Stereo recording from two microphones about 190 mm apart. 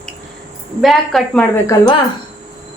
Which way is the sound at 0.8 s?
Centre (ahead or behind).